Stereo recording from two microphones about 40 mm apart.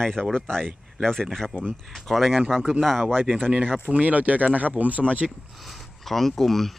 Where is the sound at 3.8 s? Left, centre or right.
Right.